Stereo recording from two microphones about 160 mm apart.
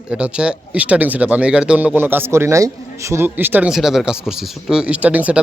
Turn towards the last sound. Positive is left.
turn(degrees=-10)  # may be behind; listen again after turning